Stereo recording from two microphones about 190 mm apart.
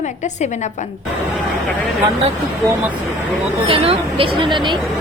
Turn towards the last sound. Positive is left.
turn(degrees=-25)  # may be behind; listen again after turning